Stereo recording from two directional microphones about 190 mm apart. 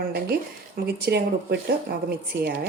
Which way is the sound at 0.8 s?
55° right (ahead or behind).